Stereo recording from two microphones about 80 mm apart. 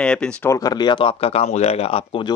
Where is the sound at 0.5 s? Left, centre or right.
Left.